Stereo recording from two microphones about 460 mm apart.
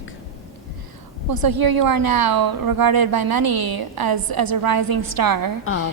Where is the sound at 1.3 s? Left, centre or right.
Right.